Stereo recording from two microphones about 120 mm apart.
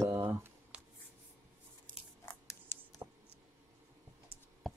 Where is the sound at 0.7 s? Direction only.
10° right (ahead or behind).